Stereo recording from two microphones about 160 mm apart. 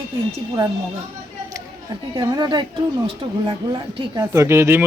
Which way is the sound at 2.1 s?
25° right (ahead or behind).